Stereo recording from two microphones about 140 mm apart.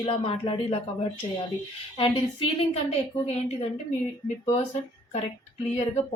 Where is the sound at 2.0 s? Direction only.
45° left (ahead or behind).